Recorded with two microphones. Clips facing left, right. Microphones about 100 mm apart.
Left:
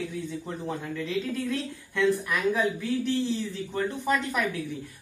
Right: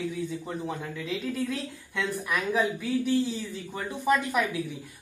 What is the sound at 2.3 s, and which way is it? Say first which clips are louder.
A woman's voice: left 1 dB; 5° right (ahead or behind).